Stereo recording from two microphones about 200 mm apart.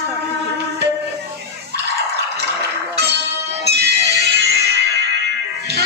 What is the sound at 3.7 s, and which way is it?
Music, 55° right (ahead or behind).